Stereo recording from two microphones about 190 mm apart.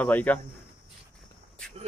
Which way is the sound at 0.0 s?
10° left (ahead or behind).